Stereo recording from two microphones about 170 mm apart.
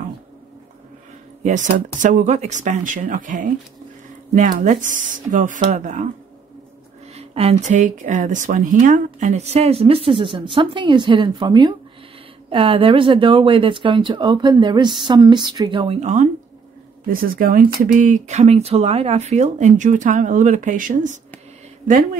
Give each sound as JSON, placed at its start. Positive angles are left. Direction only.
{"t": 1.4, "sound": "speech", "side_deg": -45}
{"t": 7.2, "sound": "speech", "side_deg": -40}
{"t": 17.1, "sound": "speech", "side_deg": -55}